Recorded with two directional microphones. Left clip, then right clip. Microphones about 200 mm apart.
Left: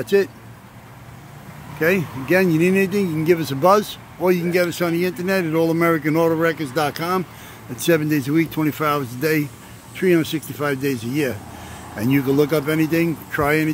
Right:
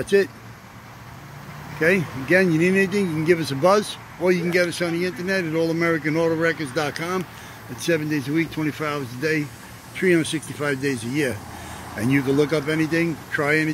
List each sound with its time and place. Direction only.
0.0 s speech: centre (ahead or behind)
1.8 s speech: 5° left (ahead or behind)
7.7 s speech: 25° left (ahead or behind)
9.9 s speech: 10° left (ahead or behind)